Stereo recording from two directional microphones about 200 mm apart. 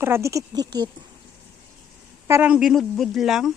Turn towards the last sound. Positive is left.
turn(degrees=0)  # may be behind; listen again after turning